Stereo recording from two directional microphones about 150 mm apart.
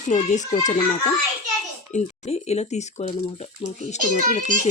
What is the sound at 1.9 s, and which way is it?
Speech, 50° left (ahead or behind).